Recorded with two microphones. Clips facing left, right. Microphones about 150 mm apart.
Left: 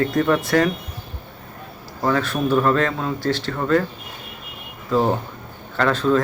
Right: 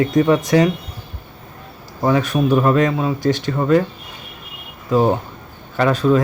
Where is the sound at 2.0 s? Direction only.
15° right (ahead or behind).